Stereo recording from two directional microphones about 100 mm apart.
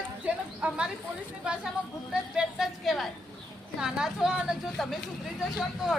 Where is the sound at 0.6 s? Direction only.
15° right (ahead or behind).